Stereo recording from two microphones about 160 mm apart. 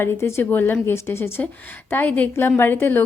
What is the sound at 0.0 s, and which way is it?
A woman's voice, 15° left (ahead or behind).